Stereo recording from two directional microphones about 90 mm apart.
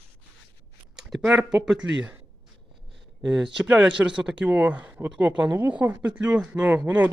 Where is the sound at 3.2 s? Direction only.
5° right (ahead or behind).